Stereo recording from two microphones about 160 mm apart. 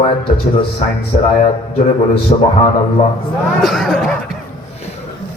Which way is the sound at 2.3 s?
35° left (ahead or behind).